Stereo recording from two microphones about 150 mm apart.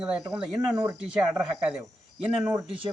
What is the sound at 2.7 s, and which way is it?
Speech, 35° right (ahead or behind).